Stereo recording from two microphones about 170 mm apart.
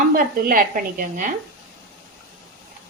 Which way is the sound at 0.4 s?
55° right (ahead or behind).